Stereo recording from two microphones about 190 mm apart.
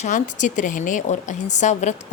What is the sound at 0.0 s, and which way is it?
A woman's voice, 40° left (ahead or behind).